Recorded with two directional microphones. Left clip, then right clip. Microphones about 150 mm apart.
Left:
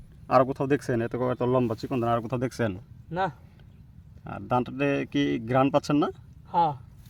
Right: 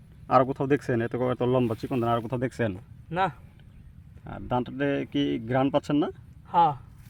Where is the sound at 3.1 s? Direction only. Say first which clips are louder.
Right 2 dB; 15° right (ahead or behind).